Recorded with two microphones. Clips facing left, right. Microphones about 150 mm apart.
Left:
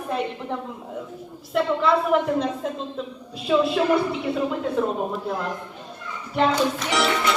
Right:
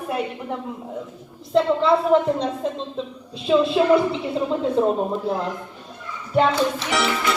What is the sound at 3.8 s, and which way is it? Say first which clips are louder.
Speech: right 3 dB; 20° right (ahead or behind).